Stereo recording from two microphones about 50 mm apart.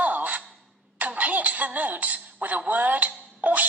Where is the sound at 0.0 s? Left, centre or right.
Right.